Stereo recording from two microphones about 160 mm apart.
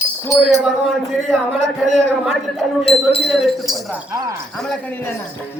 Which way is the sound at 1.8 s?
Centre (ahead or behind).